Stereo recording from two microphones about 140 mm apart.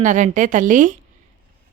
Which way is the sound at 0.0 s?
60° right (ahead or behind).